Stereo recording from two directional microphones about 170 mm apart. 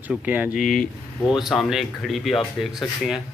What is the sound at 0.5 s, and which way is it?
Speech, 55° left (ahead or behind).